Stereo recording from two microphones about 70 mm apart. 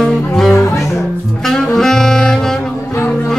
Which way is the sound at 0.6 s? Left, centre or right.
Left.